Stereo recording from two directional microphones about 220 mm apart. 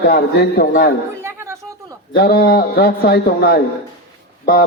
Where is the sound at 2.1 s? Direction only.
45° left (ahead or behind).